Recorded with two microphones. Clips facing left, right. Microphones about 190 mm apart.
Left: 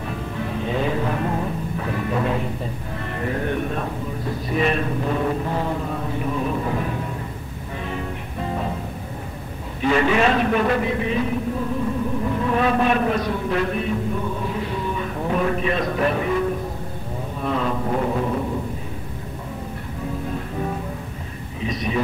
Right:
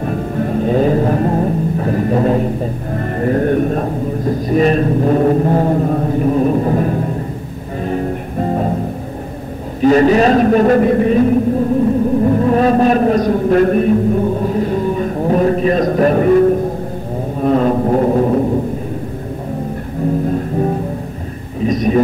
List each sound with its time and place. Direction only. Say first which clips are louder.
0.0 s music: right 10 dB; 45° right (ahead or behind)
9.8 s a sound: right 9 dB; 40° right (ahead or behind)
20.2 s music: right 10 dB; 40° right (ahead or behind)
21.6 s a man's voice: right 11 dB; 45° right (ahead or behind)